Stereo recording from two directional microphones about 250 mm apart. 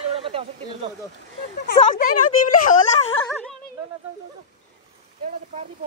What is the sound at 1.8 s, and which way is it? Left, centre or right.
Speech, left.